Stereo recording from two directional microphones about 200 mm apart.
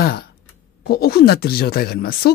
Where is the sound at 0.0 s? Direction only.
50° left (ahead or behind).